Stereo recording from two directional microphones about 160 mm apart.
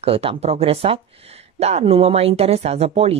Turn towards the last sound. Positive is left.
turn(degrees=-40)  # may be behind; listen again after turning